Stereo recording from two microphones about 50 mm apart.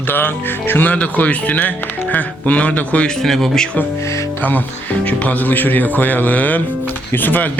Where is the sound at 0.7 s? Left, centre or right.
Left.